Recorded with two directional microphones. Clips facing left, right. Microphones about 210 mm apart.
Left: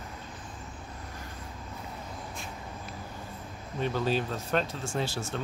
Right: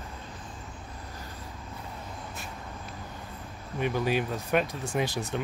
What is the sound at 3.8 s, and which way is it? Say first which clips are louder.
Speech: right 1 dB; 15° right (ahead or behind).